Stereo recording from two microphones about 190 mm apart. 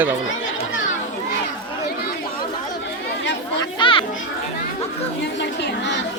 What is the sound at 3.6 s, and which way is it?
Children playing, 25° left (ahead or behind).